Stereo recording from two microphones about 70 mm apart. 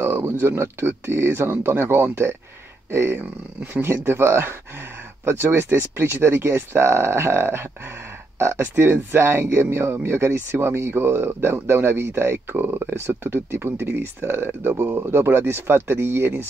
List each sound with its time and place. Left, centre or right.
0.0 s speech: right